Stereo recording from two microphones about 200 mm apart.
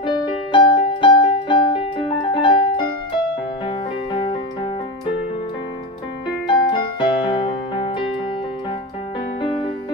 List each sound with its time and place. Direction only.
0.0 s music: 25° left (ahead or behind)
2.3 s piano: 25° left (ahead or behind)
3.6 s music: 25° left (ahead or behind)
6.4 s piano: 25° left (ahead or behind)